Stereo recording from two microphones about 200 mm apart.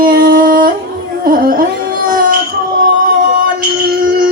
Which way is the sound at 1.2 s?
45° right (ahead or behind).